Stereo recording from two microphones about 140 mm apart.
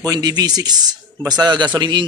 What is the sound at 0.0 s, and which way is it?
A man's voice, 30° right (ahead or behind).